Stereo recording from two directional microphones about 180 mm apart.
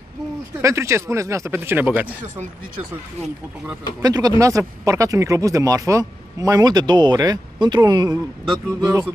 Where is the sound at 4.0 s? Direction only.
20° right (ahead or behind).